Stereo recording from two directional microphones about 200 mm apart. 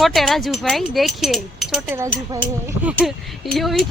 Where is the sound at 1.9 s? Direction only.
15° right (ahead or behind).